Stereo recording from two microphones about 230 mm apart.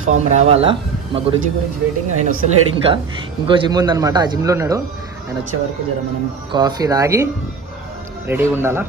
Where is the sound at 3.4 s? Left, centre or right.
Centre.